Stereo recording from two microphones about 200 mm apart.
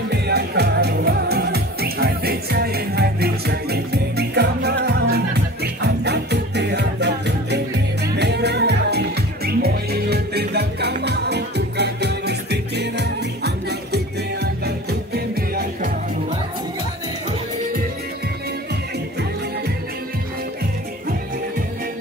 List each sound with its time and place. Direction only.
0.1 s music: 55° right (ahead or behind)